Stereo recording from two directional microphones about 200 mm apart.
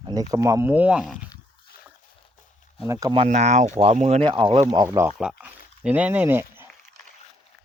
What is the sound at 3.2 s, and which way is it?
Speech, 35° right (ahead or behind).